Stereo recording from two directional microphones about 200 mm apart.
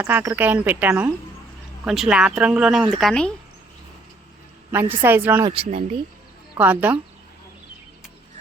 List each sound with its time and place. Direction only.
0.0 s speech: 10° right (ahead or behind); by 3.3 s 5° left (ahead or behind)
4.7 s a woman's voice: 10° right (ahead or behind)
5.5 s speech: 30° right (ahead or behind)
6.6 s speech: 10° right (ahead or behind)